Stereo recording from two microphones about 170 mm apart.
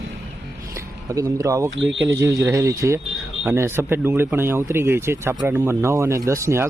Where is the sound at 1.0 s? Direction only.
20° right (ahead or behind).